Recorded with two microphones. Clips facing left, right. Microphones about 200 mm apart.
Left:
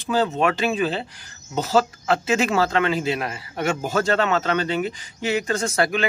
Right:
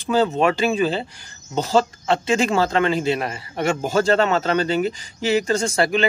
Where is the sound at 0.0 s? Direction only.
Centre (ahead or behind).